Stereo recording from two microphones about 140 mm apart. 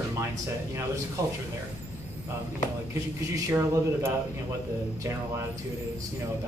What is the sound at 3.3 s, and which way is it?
Speech, 20° right (ahead or behind).